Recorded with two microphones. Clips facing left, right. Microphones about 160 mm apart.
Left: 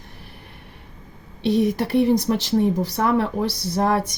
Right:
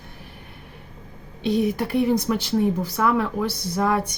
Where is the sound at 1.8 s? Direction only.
35° left (ahead or behind).